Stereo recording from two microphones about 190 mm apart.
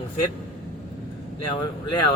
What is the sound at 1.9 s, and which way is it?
Speech, 25° left (ahead or behind).